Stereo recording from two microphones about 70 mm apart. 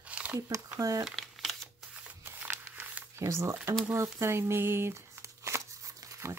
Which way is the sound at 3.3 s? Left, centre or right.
Right.